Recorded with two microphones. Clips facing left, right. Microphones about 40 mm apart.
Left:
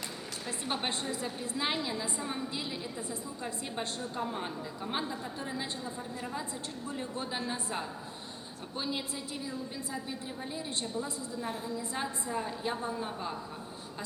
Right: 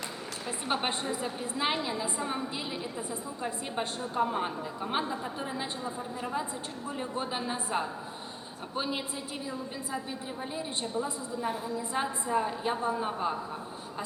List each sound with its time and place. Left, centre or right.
0.4 s a woman's voice: centre
10.5 s a woman's voice: centre